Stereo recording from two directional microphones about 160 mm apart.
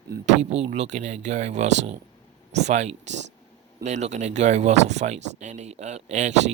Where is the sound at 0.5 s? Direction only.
45° right (ahead or behind).